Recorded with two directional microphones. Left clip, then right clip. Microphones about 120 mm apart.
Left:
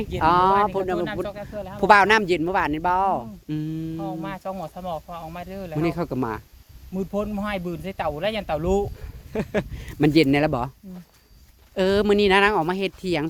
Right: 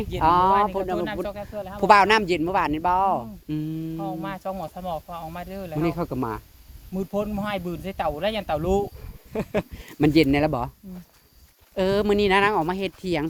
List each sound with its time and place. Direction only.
0.2 s speech: 25° left (ahead or behind)
0.5 s speech: centre (ahead or behind); by 4.0 s 25° left (ahead or behind)
4.0 s speech: centre (ahead or behind)
5.7 s speech: 25° left (ahead or behind)
6.9 s speech: 10° left (ahead or behind); by 10.7 s 30° left (ahead or behind)
11.7 s speech: 30° left (ahead or behind)